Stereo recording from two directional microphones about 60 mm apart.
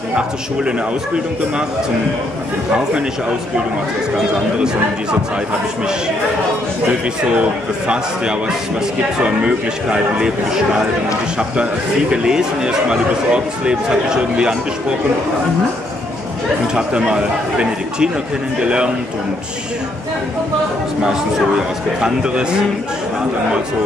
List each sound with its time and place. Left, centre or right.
9.2 s speech: centre
11.3 s speech: centre
16.7 s speech: centre
22.0 s speech: centre